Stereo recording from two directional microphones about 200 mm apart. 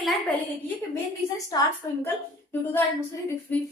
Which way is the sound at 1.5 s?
20° left (ahead or behind).